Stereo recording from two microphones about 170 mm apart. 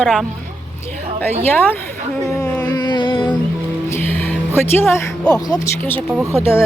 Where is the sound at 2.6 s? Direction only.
25° left (ahead or behind).